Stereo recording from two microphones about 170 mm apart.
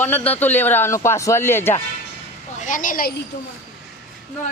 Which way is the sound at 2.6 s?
50° left (ahead or behind).